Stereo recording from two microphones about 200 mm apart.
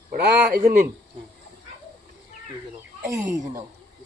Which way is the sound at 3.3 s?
15° right (ahead or behind).